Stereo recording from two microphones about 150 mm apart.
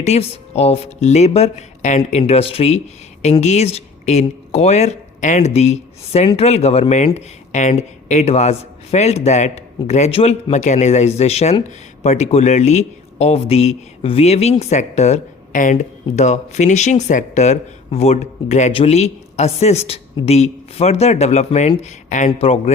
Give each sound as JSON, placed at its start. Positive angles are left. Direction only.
{"t": 0.0, "sound": "speech", "side_deg": 45}
{"t": 22.4, "sound": "speech", "side_deg": 40}